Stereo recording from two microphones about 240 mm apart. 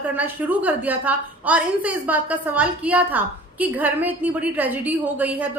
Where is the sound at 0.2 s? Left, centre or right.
Centre.